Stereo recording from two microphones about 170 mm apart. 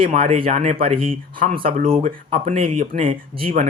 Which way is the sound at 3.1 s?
35° right (ahead or behind).